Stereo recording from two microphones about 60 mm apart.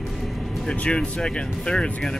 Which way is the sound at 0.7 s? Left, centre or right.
Centre.